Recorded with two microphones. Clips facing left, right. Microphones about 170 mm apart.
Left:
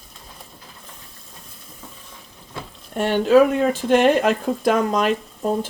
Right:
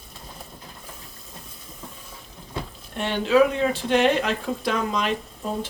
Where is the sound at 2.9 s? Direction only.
45° left (ahead or behind).